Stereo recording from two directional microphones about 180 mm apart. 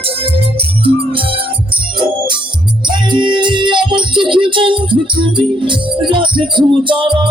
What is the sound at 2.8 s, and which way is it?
Music, 25° right (ahead or behind).